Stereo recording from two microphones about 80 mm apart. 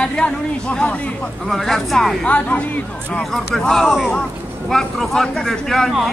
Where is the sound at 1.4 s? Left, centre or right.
Centre.